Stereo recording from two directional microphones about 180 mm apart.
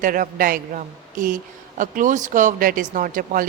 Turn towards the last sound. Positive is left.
turn(degrees=-50)  # may be behind; listen again after turning